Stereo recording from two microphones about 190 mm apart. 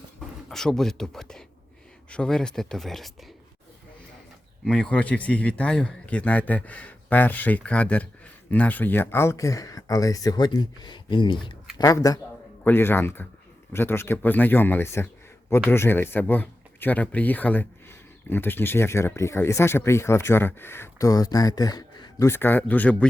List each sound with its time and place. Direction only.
0.5 s speech: centre (ahead or behind)
4.6 s a man's voice: 5° left (ahead or behind)